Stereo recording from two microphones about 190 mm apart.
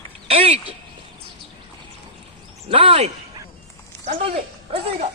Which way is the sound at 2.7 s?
30° right (ahead or behind).